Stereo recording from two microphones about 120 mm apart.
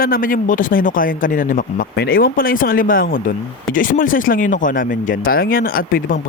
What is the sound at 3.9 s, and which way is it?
Speech, 90° left.